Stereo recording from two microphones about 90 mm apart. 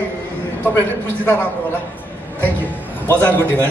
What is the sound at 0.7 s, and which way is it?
Speech, 25° left (ahead or behind).